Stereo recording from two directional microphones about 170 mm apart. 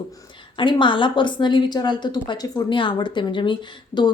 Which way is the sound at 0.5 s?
30° left (ahead or behind).